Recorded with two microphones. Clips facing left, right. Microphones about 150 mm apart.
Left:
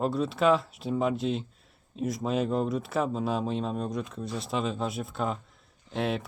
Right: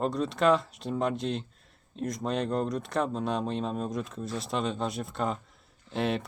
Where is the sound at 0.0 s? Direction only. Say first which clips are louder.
Left 1 dB; centre (ahead or behind).